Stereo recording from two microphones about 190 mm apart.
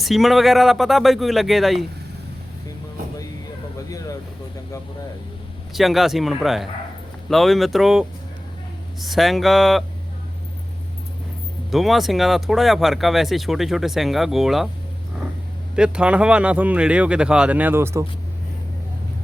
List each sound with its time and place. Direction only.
0.0 s speech: centre (ahead or behind)
3.8 s a sound: 20° left (ahead or behind)
5.7 s speech: centre (ahead or behind)
11.7 s speech: centre (ahead or behind)
15.7 s speech: 5° right (ahead or behind)